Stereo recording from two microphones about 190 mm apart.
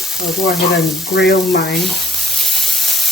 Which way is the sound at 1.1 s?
60° left (ahead or behind).